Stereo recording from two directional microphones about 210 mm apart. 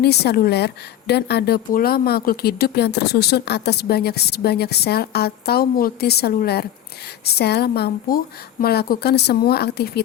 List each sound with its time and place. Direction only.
0.0 s speech: 50° left (ahead or behind)